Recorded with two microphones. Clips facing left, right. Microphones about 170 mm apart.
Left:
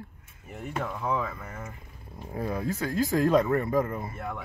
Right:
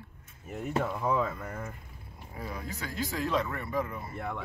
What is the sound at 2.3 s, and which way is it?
Speech, 45° left (ahead or behind).